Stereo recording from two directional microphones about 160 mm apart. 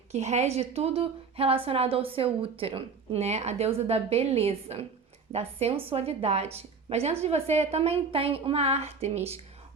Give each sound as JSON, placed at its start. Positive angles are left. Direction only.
{"t": 0.1, "sound": "a woman's voice", "side_deg": -45}